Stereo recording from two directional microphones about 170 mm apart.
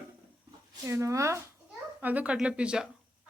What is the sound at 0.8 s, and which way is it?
Speech, 15° right (ahead or behind).